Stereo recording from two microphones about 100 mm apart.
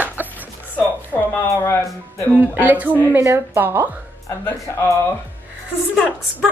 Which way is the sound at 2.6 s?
15° right (ahead or behind).